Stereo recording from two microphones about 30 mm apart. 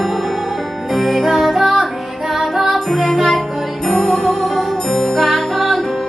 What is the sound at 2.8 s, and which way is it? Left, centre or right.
Music, centre.